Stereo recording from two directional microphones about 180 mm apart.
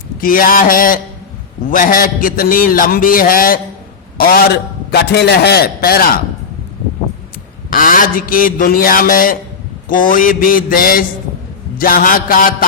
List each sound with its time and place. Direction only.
0.2 s a man's voice: 50° left (ahead or behind)
7.7 s a man's voice: 50° left (ahead or behind)